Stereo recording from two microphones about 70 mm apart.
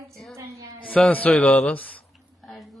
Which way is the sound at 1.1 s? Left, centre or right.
Left.